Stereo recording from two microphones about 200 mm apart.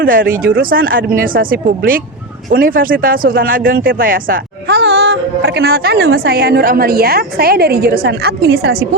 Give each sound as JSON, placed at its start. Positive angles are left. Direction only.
{"t": 0.0, "sound": "speech", "side_deg": -45}